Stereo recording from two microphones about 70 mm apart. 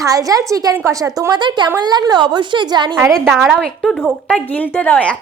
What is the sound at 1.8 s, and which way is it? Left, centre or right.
A woman's voice, right.